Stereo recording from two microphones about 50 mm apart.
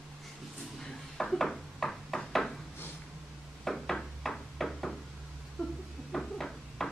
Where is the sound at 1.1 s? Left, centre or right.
Centre.